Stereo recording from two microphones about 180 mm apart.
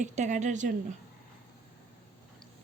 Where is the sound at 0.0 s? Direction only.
40° right (ahead or behind).